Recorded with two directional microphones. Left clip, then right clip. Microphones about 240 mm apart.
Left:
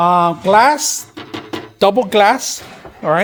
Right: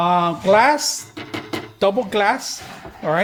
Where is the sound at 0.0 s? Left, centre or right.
Left.